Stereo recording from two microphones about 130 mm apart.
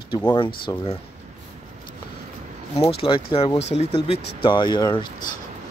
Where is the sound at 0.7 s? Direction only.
25° left (ahead or behind).